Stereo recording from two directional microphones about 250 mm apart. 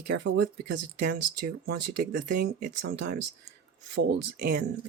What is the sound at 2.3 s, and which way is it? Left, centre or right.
Speech, right.